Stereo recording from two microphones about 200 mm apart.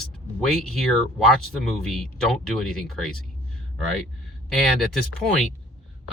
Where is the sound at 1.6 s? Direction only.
5° left (ahead or behind).